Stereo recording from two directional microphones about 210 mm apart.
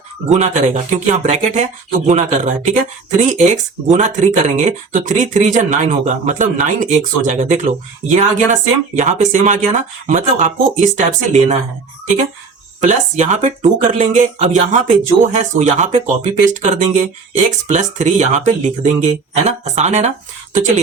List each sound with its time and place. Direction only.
0.3 s speech: 30° right (ahead or behind)
12.8 s speech: 35° right (ahead or behind)